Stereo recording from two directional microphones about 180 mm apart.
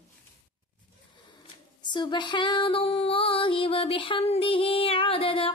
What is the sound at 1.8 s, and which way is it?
Music, 25° left (ahead or behind).